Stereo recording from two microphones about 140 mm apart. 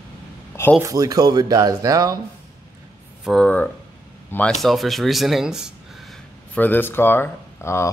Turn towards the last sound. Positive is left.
turn(degrees=20)  # may be behind; listen again after turning